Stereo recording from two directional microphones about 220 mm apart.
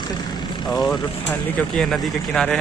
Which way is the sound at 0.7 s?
15° left (ahead or behind).